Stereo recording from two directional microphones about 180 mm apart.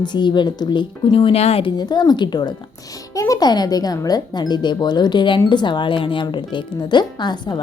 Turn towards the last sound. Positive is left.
turn(degrees=25)  # may be behind; listen again after turning